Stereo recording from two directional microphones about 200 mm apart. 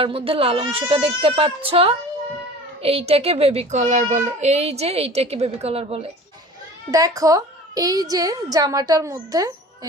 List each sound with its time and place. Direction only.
0.0 s a child's voice: 25° right (ahead or behind)
6.9 s a woman's voice: 15° right (ahead or behind)